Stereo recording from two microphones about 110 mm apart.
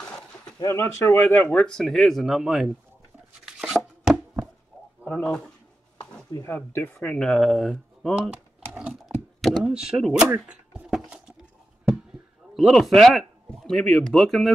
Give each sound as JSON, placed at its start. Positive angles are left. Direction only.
{"t": 0.6, "sound": "speech", "side_deg": 25}
{"t": 3.4, "sound": "chopping", "side_deg": -5}
{"t": 5.1, "sound": "speech", "side_deg": 10}
{"t": 6.4, "sound": "speech", "side_deg": 20}
{"t": 7.0, "sound": "speech", "side_deg": 10}
{"t": 8.3, "sound": "typing", "side_deg": -10}
{"t": 9.4, "sound": "a sound", "side_deg": 0}
{"t": 12.5, "sound": "speech", "side_deg": 0}